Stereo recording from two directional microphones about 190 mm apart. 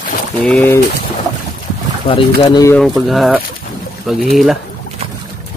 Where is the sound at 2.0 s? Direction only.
25° left (ahead or behind).